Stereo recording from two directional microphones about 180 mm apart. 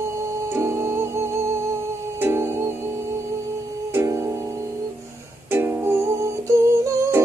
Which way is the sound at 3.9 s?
15° right (ahead or behind).